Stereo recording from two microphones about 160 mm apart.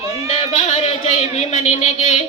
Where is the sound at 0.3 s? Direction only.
45° left (ahead or behind).